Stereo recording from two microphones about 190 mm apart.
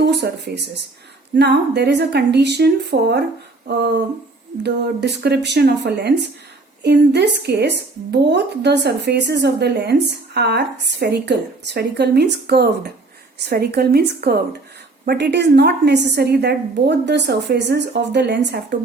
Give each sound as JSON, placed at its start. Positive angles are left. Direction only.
{"t": 0.0, "sound": "speech", "side_deg": -65}